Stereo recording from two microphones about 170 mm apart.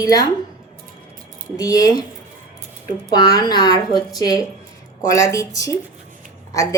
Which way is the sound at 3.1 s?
25° left (ahead or behind).